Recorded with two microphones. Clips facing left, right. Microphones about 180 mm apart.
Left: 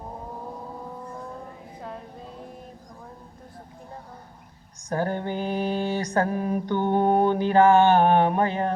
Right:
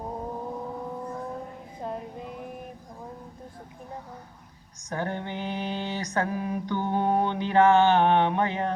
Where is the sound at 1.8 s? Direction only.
20° right (ahead or behind).